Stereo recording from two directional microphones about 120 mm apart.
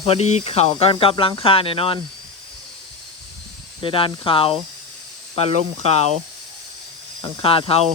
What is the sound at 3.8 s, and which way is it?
Speech, 45° left (ahead or behind).